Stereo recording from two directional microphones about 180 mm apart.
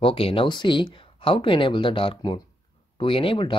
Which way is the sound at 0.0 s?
30° left (ahead or behind).